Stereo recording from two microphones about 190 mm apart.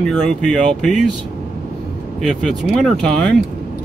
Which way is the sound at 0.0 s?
5° left (ahead or behind).